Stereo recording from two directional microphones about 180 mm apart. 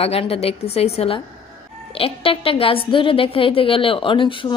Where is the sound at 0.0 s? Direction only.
35° left (ahead or behind).